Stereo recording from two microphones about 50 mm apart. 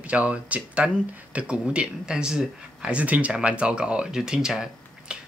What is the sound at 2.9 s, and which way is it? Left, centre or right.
Speech, right.